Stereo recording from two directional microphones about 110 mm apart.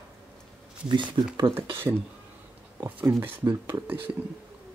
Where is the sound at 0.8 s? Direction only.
45° right (ahead or behind).